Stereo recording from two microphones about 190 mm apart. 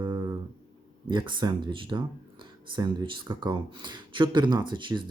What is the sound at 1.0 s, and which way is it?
Speech, 25° right (ahead or behind).